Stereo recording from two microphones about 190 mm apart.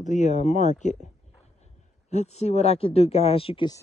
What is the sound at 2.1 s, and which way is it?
Speech, 35° left (ahead or behind).